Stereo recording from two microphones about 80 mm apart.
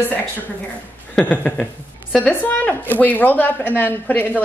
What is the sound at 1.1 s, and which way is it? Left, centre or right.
A woman's voice, centre.